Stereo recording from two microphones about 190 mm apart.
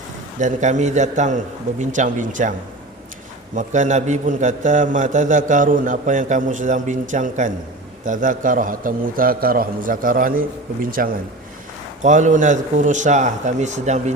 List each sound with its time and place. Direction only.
0.3 s a man's voice: 40° right (ahead or behind)